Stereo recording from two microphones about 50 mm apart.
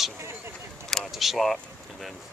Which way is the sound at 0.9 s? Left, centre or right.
Centre.